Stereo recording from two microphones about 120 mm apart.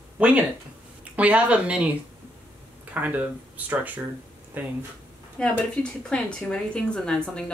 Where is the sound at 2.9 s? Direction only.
15° right (ahead or behind).